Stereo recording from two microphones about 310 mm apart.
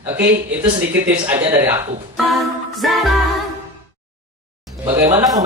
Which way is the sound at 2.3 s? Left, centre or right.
Centre.